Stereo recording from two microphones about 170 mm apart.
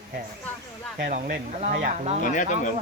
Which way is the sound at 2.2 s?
50° left (ahead or behind).